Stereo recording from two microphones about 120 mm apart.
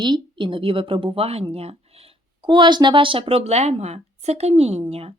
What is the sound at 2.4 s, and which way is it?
Speech, 40° right (ahead or behind).